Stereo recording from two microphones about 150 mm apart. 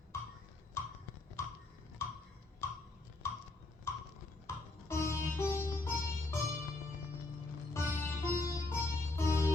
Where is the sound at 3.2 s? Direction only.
15° left (ahead or behind).